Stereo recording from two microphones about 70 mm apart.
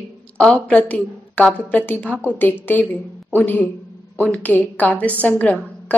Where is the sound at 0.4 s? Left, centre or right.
Centre.